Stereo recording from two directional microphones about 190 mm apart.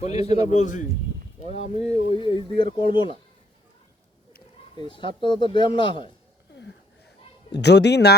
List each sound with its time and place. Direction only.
0.0 s a man's voice: 35° left (ahead or behind)
4.9 s speech: 25° left (ahead or behind)
7.5 s a man's voice: 60° left (ahead or behind)